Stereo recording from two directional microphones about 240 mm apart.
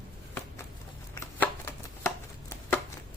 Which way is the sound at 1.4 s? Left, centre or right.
Centre.